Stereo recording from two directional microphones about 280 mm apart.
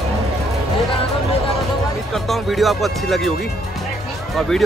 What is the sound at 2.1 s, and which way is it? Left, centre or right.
Speech, centre.